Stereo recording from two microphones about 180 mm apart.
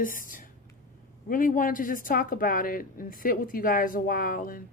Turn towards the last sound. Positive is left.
turn(degrees=50)  # may be behind; listen again after turning